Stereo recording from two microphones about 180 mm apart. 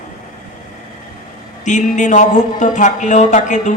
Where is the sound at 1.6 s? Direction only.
40° left (ahead or behind).